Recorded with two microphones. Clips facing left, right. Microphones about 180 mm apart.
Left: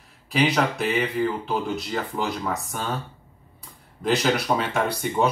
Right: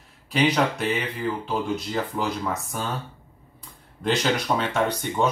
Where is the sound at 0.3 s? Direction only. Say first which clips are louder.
Even; centre (ahead or behind).